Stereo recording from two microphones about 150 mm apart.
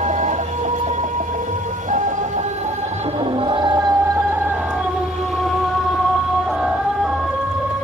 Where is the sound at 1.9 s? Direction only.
55° right (ahead or behind).